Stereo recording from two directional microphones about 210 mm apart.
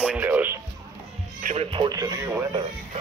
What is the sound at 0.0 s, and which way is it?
Music, 5° right (ahead or behind).